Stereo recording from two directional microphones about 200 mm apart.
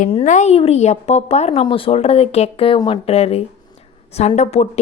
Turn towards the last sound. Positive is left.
turn(degrees=30)  # may be behind; listen again after turning